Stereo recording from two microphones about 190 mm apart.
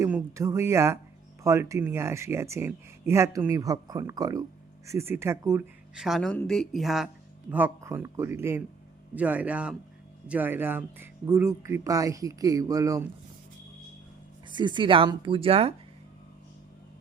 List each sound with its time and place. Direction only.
0.0 s speech: 15° right (ahead or behind)
5.9 s speech: centre (ahead or behind)
7.5 s speech: 10° right (ahead or behind)
14.5 s speech: 25° right (ahead or behind)